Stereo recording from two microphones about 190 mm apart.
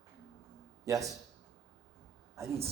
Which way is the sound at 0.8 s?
15° right (ahead or behind).